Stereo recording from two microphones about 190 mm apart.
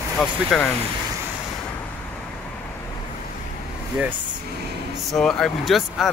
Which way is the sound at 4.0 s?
10° right (ahead or behind).